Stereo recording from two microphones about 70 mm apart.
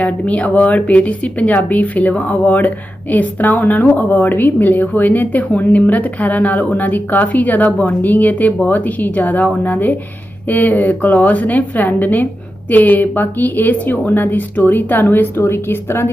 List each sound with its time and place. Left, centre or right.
0.0 s speech: centre; by 16.1 s left